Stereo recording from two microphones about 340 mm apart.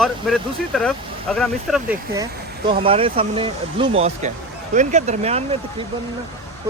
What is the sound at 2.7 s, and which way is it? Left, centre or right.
Speech, centre.